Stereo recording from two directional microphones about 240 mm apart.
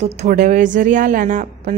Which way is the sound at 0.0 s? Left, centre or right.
Right.